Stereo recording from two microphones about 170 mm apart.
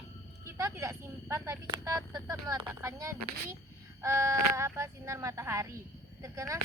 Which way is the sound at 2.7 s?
20° right (ahead or behind).